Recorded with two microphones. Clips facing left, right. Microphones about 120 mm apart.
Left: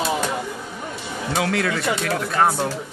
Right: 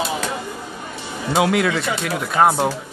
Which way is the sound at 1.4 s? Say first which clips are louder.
Right 5 dB; 15° right (ahead or behind).